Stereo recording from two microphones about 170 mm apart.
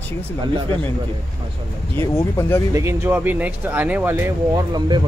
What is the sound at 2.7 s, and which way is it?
Speech, 15° right (ahead or behind).